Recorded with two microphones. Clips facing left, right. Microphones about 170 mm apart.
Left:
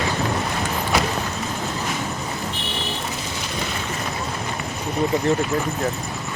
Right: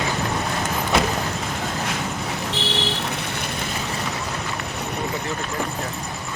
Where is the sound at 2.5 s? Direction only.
85° right; by 3.4 s 65° right (ahead or behind).